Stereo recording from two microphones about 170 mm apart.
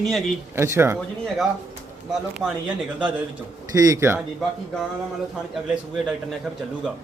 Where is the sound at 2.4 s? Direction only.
5° right (ahead or behind).